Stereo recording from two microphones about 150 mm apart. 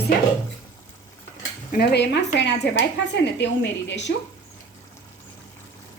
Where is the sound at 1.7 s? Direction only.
80° left.